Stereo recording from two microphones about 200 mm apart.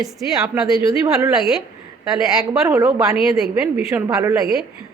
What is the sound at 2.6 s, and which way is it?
Speech, 15° right (ahead or behind).